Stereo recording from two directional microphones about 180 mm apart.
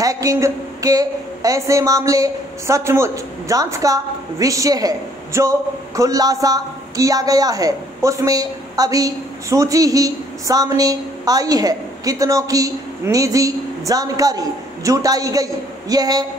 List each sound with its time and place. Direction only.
0.0 s a woman's voice: 20° right (ahead or behind)